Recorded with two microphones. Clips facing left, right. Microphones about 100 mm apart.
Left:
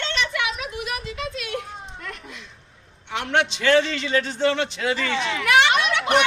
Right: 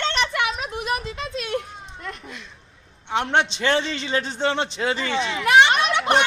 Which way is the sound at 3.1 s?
25° right (ahead or behind).